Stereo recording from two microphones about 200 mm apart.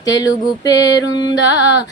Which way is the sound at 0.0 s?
20° left (ahead or behind).